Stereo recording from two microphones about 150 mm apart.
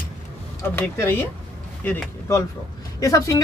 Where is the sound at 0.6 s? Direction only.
15° left (ahead or behind).